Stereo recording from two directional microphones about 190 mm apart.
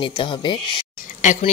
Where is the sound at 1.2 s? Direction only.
40° left (ahead or behind).